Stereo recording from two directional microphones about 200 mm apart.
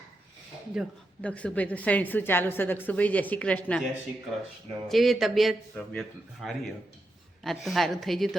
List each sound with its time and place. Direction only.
0.8 s a woman's voice: centre (ahead or behind)
4.9 s speech: centre (ahead or behind)